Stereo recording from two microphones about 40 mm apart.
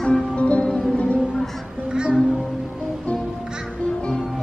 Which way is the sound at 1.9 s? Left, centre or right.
Right.